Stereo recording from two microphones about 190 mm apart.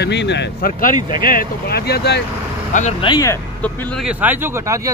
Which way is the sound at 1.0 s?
25° right (ahead or behind).